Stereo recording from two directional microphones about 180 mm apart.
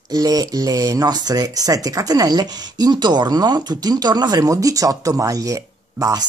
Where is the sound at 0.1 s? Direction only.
20° right (ahead or behind).